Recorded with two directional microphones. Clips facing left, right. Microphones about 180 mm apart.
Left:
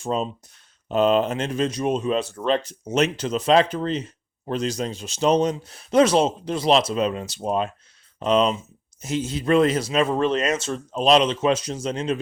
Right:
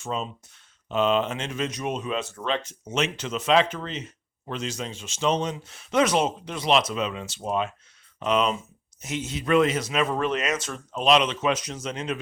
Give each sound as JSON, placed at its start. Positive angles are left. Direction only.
{"t": 0.0, "sound": "speech", "side_deg": 35}